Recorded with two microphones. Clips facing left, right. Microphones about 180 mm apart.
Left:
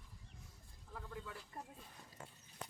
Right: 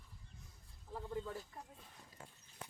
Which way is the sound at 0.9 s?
30° right (ahead or behind).